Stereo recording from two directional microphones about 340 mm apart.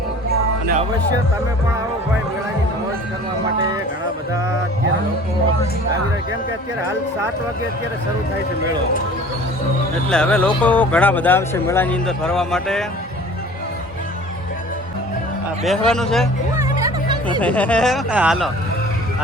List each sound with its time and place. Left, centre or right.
10.1 s speech: centre
15.6 s speech: centre
16.7 s music: centre
17.4 s speech: centre